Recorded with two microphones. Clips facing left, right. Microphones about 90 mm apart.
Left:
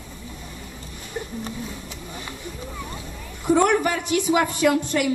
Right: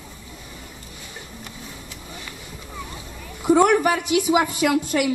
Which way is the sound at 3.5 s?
5° right (ahead or behind).